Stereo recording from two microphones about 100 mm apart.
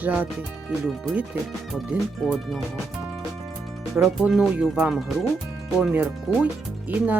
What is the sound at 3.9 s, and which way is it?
Speech, 5° right (ahead or behind).